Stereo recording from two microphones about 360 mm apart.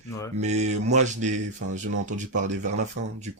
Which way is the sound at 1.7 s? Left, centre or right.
Right.